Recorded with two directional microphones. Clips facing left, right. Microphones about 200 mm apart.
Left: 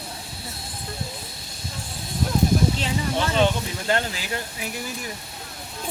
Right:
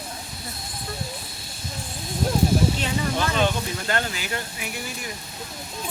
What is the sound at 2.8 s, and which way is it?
Speech, 25° left (ahead or behind).